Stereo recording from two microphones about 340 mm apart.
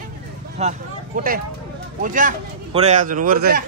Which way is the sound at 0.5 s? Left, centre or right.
Right.